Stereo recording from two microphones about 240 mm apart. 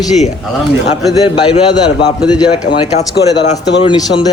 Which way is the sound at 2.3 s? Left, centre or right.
Centre.